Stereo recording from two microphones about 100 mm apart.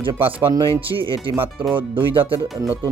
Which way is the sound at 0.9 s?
45° right (ahead or behind).